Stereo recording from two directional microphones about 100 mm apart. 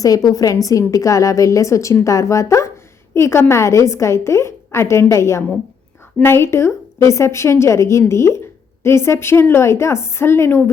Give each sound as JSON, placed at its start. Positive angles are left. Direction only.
{"t": 0.0, "sound": "a woman's voice", "side_deg": 35}